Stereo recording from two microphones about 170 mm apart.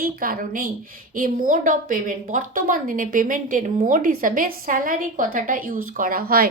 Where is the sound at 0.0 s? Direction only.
55° right (ahead or behind).